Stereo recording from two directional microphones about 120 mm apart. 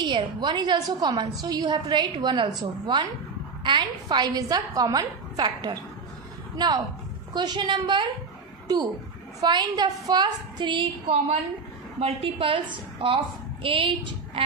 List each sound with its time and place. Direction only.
0.0 s a woman's voice: 40° right (ahead or behind)
9.4 s a woman's voice: 35° right (ahead or behind)
12.0 s a woman's voice: 50° right (ahead or behind)